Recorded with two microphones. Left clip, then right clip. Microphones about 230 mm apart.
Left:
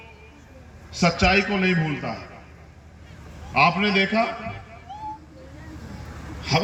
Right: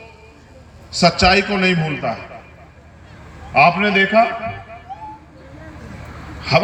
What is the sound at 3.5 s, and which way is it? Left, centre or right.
Speech, right.